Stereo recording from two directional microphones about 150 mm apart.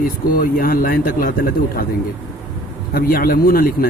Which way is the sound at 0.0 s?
75° left (ahead or behind).